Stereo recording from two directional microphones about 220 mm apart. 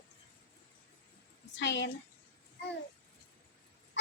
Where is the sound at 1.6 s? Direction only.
55° left (ahead or behind).